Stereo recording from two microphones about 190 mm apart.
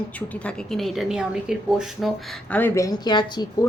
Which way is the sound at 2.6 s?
15° left (ahead or behind).